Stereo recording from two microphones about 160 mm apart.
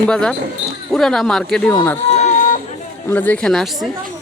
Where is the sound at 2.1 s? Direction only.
45° left (ahead or behind).